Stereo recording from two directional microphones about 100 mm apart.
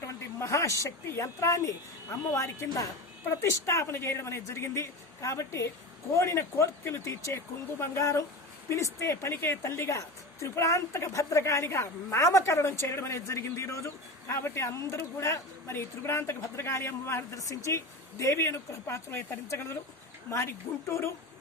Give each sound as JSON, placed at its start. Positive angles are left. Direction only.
{"t": 0.0, "sound": "a woman's voice", "side_deg": 30}